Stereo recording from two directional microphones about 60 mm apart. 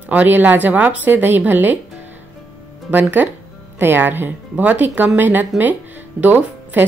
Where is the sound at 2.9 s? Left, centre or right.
Right.